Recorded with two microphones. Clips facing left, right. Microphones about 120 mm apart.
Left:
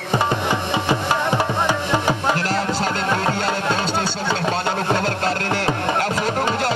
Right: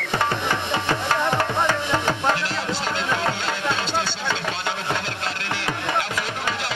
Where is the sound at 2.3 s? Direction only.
40° left (ahead or behind).